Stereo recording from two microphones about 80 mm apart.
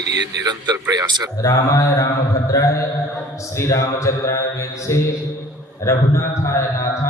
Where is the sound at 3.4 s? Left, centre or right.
Left.